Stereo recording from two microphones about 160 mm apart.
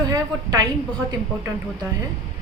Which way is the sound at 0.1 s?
25° right (ahead or behind).